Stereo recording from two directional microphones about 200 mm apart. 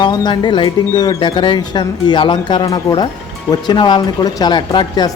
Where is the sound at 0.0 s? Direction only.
20° left (ahead or behind).